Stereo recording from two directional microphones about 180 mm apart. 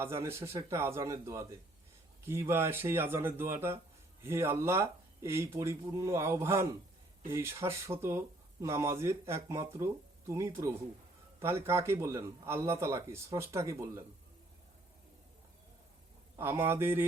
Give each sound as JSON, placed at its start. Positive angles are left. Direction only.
{"t": 0.0, "sound": "a man's voice", "side_deg": -15}
{"t": 16.4, "sound": "a man's voice", "side_deg": -15}